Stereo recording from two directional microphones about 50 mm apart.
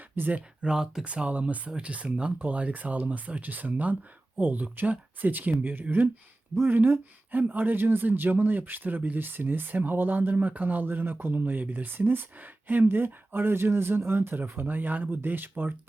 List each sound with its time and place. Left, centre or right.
0.2 s speech: right
0.6 s speech: centre
1.0 s speech: right